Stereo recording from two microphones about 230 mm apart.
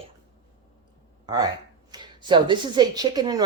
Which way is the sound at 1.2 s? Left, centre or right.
Centre.